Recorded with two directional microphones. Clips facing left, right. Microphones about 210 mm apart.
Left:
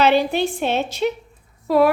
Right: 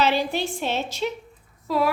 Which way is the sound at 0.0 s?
60° left (ahead or behind).